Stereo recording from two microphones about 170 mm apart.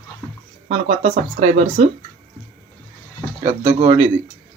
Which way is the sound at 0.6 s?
40° right (ahead or behind).